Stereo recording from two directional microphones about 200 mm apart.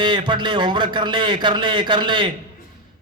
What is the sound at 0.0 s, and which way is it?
A man's voice, 25° right (ahead or behind).